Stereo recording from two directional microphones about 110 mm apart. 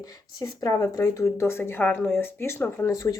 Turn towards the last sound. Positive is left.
turn(degrees=30)  # may be behind; listen again after turning